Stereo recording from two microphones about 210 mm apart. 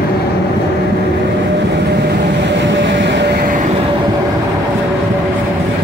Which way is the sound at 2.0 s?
55° right (ahead or behind).